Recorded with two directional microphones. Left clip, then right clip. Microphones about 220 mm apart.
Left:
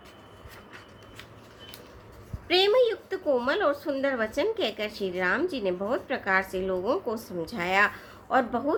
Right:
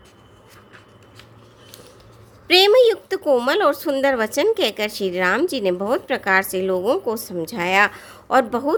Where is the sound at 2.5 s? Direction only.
45° right (ahead or behind).